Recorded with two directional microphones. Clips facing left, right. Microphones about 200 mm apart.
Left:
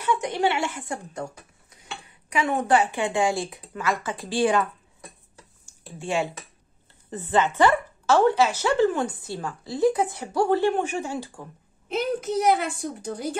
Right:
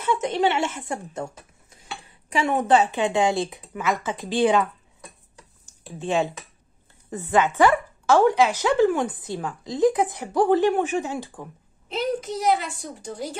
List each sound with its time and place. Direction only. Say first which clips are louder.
0.0 s a woman's voice: right 2 dB; 25° right (ahead or behind)
5.7 s speech: right 3 dB; 20° right (ahead or behind)
11.9 s a woman's voice: left 1 dB; 55° left (ahead or behind)